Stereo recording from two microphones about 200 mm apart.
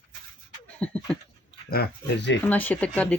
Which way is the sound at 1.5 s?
55° left (ahead or behind).